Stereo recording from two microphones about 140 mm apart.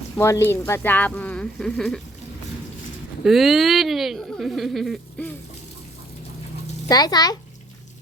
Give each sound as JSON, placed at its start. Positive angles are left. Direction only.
{"t": 0.2, "sound": "speech", "side_deg": 20}
{"t": 3.2, "sound": "speech", "side_deg": 0}
{"t": 6.8, "sound": "a child's voice", "side_deg": 30}